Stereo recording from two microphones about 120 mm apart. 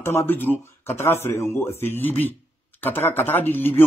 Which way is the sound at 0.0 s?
20° left (ahead or behind).